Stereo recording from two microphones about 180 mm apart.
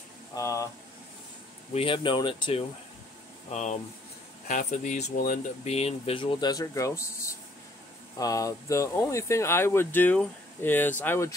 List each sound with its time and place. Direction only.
0.3 s speech: 15° left (ahead or behind)
1.7 s speech: 30° left (ahead or behind)
3.4 s speech: 40° left (ahead or behind)
5.6 s speech: 35° left (ahead or behind); by 11.3 s 15° left (ahead or behind)